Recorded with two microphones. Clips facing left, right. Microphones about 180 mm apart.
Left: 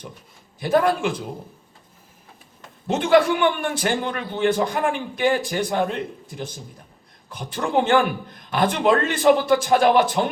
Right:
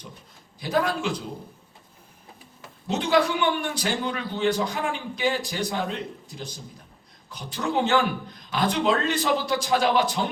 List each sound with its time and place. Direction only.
0.6 s a man's voice: 50° left (ahead or behind)
2.8 s a man's voice: 55° left (ahead or behind)